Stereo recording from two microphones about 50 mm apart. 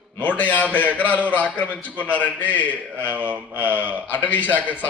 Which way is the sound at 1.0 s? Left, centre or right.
Right.